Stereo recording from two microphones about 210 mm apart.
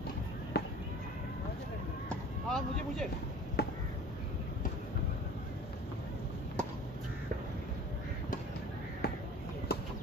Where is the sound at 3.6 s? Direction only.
50° left (ahead or behind).